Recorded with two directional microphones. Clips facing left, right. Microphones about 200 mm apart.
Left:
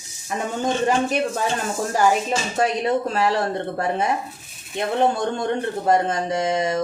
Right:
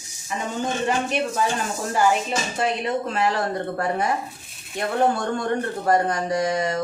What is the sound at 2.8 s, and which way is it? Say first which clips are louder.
Speech: left 3 dB; 35° left (ahead or behind).